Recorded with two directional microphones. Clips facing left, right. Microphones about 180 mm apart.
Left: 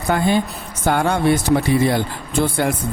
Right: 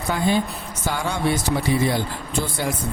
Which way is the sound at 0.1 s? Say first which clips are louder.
Left 3 dB; 60° left (ahead or behind).